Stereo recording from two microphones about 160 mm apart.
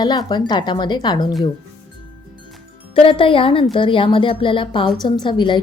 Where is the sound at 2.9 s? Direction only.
35° left (ahead or behind).